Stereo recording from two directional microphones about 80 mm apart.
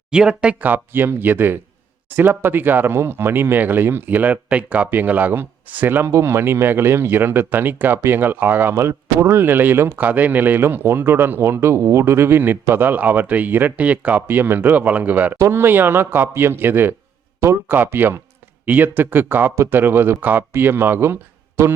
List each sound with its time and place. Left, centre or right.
0.1 s speech: centre
0.6 s speech: right
15.4 s speech: right